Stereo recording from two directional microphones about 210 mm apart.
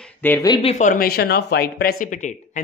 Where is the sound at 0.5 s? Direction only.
30° left (ahead or behind).